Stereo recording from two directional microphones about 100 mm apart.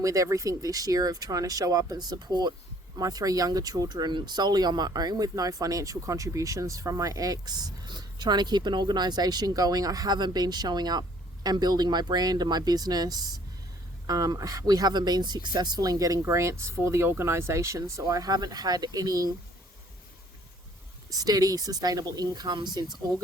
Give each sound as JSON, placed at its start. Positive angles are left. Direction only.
{"t": 0.0, "sound": "speech", "side_deg": -35}
{"t": 21.1, "sound": "speech", "side_deg": -40}